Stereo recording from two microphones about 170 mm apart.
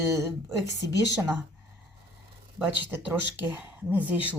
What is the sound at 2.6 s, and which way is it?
Speech, 10° right (ahead or behind).